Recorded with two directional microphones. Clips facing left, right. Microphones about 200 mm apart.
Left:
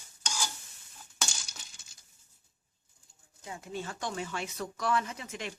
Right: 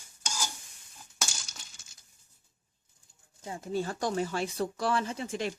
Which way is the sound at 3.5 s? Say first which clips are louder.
Right 6 dB; 35° right (ahead or behind).